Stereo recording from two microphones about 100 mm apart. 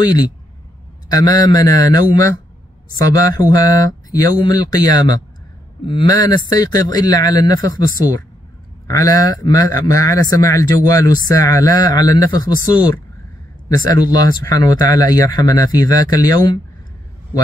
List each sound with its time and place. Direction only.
1.0 s a man's voice: 40° left (ahead or behind)
8.8 s a man's voice: 35° left (ahead or behind)